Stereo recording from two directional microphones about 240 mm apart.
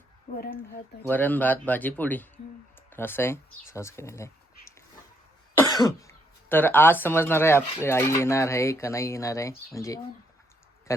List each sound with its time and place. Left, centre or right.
0.3 s speech: left
1.0 s speech: centre
5.5 s speech: centre